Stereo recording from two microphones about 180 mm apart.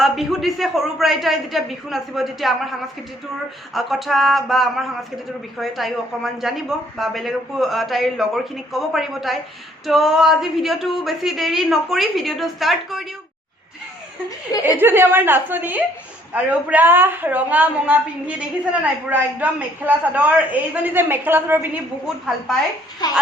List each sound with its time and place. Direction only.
0.0 s speech: centre (ahead or behind)
3.8 s speech: centre (ahead or behind)
14.8 s a woman's voice: 10° right (ahead or behind)
23.0 s speech: 20° left (ahead or behind)